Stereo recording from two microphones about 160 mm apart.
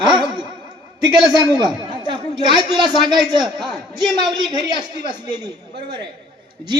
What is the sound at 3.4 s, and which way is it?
Speech, centre (ahead or behind).